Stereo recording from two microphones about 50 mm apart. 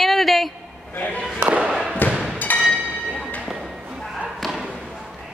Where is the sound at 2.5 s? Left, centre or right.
Left.